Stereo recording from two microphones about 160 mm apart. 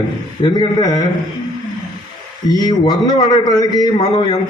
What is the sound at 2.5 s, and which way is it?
A man's voice, 25° left (ahead or behind).